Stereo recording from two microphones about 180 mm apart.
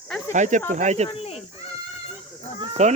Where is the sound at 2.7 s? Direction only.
40° right (ahead or behind).